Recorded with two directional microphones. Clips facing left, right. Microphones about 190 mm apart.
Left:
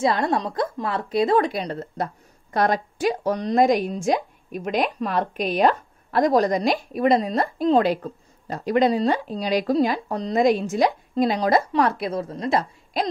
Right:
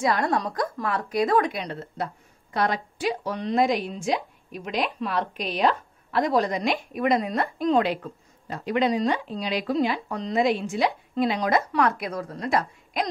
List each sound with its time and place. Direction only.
0.0 s a woman's voice: 25° left (ahead or behind)